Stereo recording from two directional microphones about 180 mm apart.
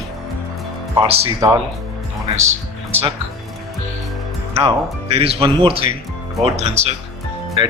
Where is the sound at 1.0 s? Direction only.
30° right (ahead or behind).